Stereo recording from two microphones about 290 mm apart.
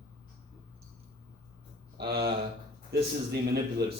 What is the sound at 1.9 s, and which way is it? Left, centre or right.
Speech, right.